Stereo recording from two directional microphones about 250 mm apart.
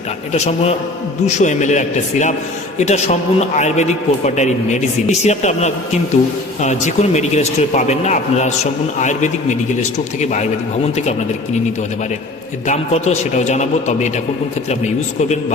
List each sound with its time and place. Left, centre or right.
0.3 s a man's voice: left
12.6 s a man's voice: left